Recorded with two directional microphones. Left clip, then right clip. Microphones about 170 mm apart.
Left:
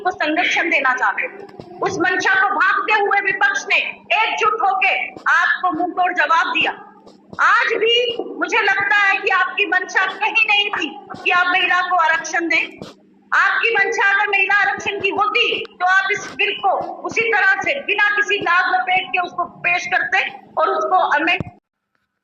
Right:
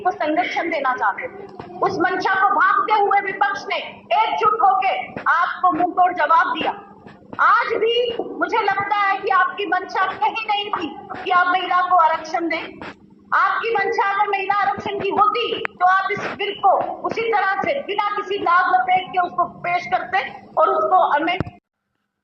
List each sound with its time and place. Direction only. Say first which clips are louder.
0.0 s a woman's voice: left 2 dB; 20° left (ahead or behind)
4.5 s a woman's voice: right 2 dB; 45° left (ahead or behind)
4.8 s a woman's voice: left 3 dB; 15° left (ahead or behind)